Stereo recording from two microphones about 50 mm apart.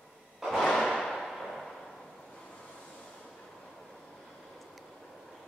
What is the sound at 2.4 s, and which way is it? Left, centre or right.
Vehicle, centre.